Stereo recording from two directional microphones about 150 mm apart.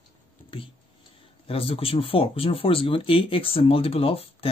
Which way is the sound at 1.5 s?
40° left (ahead or behind).